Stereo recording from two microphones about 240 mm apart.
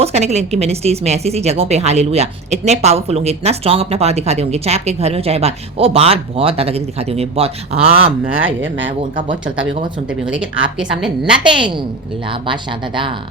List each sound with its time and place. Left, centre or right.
0.0 s speech: right
8.3 s speech: right
10.4 s speech: right
10.8 s a woman's voice: centre